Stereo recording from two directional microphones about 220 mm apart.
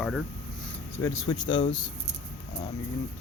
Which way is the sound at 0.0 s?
Centre (ahead or behind).